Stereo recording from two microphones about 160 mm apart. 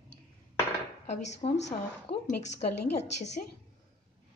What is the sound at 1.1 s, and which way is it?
A woman's voice, 45° left (ahead or behind).